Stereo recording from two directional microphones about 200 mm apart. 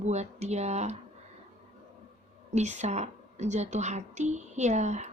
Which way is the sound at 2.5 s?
35° right (ahead or behind).